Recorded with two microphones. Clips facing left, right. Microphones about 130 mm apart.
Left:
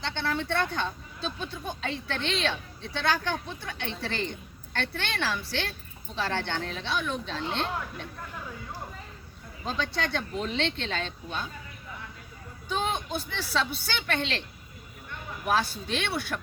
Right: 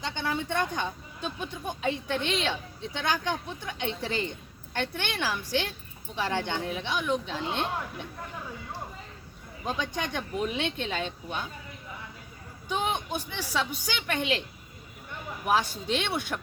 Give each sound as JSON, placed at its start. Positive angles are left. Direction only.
{"t": 0.0, "sound": "speech", "side_deg": -15}
{"t": 9.6, "sound": "speech", "side_deg": -15}
{"t": 12.6, "sound": "speech", "side_deg": -15}
{"t": 15.4, "sound": "speech", "side_deg": -15}